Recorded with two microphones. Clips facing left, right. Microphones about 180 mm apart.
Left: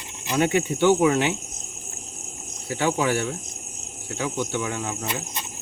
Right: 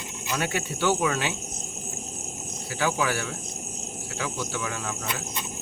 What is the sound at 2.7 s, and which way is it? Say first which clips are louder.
Speech: left 4 dB; 25° left (ahead or behind).